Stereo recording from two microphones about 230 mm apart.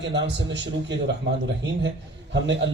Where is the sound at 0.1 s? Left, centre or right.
Right.